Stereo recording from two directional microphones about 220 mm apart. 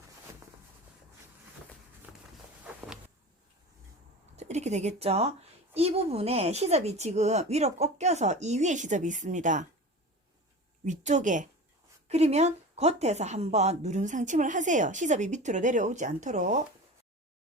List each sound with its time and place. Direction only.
4.4 s a woman's voice: 30° right (ahead or behind)
10.8 s a woman's voice: 35° right (ahead or behind)